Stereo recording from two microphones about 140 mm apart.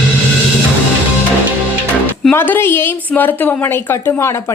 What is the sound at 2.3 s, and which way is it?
A woman's voice, 15° left (ahead or behind).